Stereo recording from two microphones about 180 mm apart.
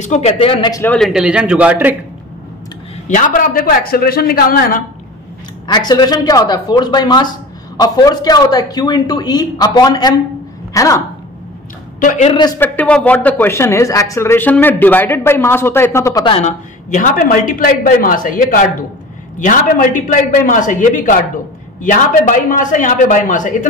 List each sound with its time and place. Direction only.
0.0 s a man's voice: 40° left (ahead or behind)
0.8 s a man's voice: centre (ahead or behind)
3.1 s speech: 45° left (ahead or behind)
5.7 s speech: 25° left (ahead or behind)
12.0 s speech: 45° left (ahead or behind)
12.3 s speech: 25° left (ahead or behind)
12.5 s speech: 10° left (ahead or behind)
16.3 s speech: 40° left (ahead or behind)